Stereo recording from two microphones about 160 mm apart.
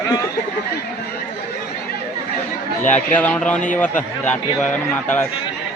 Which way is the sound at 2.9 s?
10° left (ahead or behind).